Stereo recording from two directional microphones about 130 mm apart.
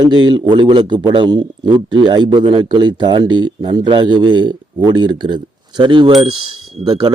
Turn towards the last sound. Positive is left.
turn(degrees=-40)  # may be behind; listen again after turning